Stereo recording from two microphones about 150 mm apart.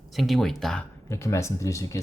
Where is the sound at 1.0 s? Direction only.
20° left (ahead or behind).